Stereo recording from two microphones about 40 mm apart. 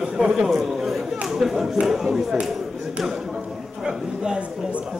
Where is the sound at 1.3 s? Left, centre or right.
Centre.